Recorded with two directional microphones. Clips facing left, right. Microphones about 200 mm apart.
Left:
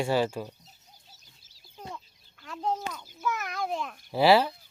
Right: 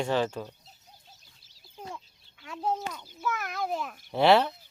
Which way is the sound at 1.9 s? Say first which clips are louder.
Even; 5° right (ahead or behind).